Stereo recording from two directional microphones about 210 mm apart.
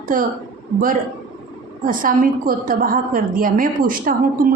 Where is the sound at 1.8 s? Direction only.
40° right (ahead or behind).